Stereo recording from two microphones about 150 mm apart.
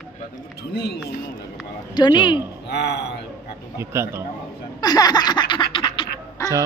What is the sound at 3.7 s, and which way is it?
Speech, 15° right (ahead or behind).